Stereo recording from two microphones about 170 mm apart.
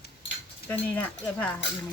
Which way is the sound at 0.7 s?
10° left (ahead or behind).